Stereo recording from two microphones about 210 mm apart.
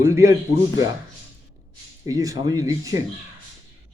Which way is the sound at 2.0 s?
15° right (ahead or behind).